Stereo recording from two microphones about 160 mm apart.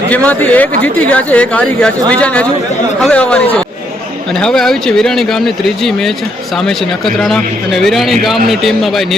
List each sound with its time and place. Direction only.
0.1 s speech: 10° left (ahead or behind)